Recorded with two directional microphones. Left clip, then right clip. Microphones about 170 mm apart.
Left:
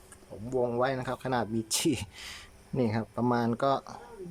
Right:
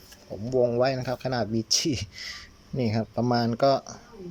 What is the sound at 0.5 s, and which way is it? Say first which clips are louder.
Speech: right 5 dB; centre (ahead or behind).